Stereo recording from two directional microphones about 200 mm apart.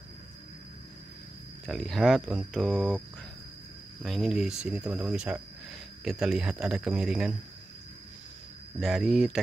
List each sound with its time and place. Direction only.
1.7 s speech: centre (ahead or behind)
4.0 s speech: centre (ahead or behind)
8.7 s speech: centre (ahead or behind)